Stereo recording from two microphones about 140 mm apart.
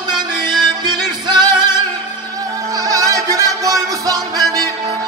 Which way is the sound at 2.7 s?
25° right (ahead or behind).